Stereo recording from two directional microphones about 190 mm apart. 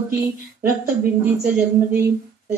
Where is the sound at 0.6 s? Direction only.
10° right (ahead or behind).